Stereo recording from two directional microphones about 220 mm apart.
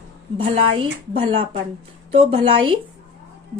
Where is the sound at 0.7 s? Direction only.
25° right (ahead or behind).